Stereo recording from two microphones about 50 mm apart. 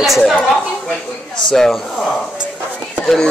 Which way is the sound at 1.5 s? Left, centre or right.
Centre.